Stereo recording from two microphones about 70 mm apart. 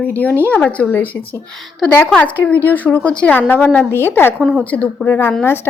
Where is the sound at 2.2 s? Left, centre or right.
Left.